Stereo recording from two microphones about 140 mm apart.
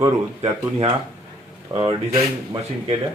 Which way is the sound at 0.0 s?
30° right (ahead or behind).